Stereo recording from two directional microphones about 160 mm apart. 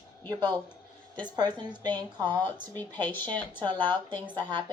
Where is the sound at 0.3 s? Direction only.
25° right (ahead or behind).